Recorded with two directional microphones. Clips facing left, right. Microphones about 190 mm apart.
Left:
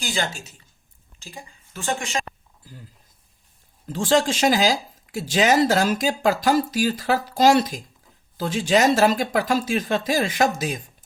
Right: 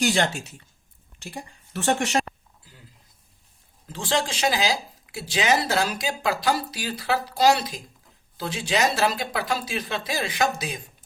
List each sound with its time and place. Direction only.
0.0 s a woman's voice: 65° right (ahead or behind)
3.8 s speech: 45° left (ahead or behind)